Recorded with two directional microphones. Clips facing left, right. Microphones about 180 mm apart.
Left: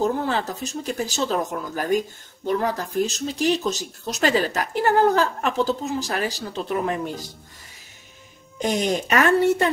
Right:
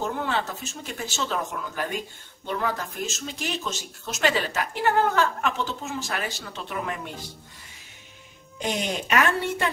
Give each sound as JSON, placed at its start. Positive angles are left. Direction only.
{"t": 0.0, "sound": "speech", "side_deg": 35}
{"t": 8.5, "sound": "a woman's voice", "side_deg": 40}